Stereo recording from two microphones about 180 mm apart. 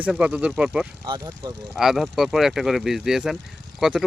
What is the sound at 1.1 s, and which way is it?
Speech, 20° right (ahead or behind).